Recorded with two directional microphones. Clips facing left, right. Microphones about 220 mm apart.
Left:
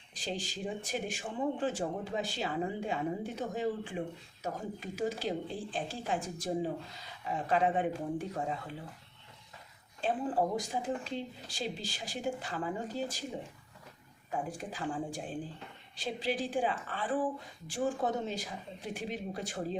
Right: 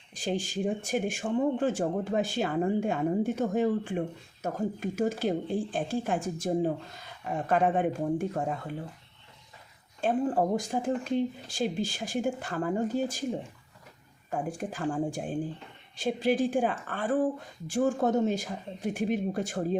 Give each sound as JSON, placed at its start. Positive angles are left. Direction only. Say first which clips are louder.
{"t": 0.1, "sound": "speech", "louder": "right 7 dB", "side_deg": -50}
{"t": 10.0, "sound": "speech", "louder": "right 5 dB", "side_deg": -50}
{"t": 14.3, "sound": "speech", "louder": "right 5 dB", "side_deg": -50}